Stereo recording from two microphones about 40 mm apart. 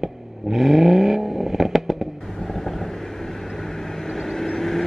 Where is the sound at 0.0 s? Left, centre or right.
Centre.